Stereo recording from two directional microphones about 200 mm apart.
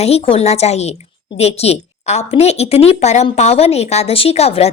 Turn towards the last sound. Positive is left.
turn(degrees=30)  # may be behind; listen again after turning